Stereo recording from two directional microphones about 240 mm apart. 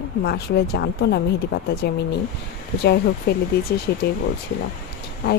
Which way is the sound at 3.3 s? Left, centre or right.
Left.